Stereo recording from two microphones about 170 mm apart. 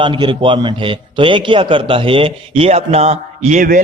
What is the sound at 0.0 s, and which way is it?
A man's voice, 30° right (ahead or behind).